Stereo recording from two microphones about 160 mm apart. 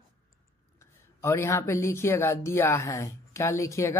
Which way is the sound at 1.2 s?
15° left (ahead or behind).